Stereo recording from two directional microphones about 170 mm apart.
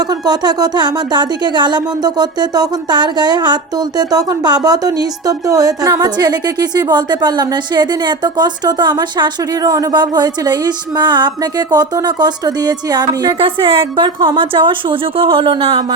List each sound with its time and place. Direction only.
0.1 s speech: 25° right (ahead or behind)